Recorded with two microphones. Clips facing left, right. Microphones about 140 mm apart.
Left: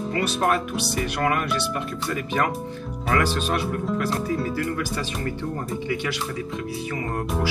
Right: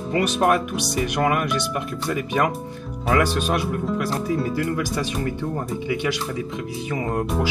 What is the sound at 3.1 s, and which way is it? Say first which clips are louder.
Speech: right 3 dB; 15° right (ahead or behind).